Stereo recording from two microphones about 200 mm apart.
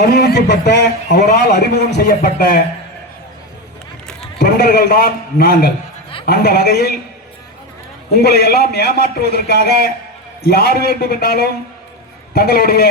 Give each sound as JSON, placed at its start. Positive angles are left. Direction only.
{"t": 0.0, "sound": "a man's voice", "side_deg": 55}
{"t": 4.4, "sound": "a man's voice", "side_deg": 55}
{"t": 8.1, "sound": "a man's voice", "side_deg": 50}